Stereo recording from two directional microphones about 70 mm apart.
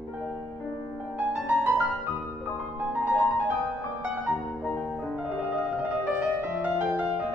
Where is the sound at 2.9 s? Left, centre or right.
Right.